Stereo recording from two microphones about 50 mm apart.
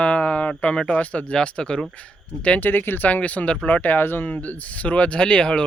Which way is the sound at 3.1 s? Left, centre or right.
Left.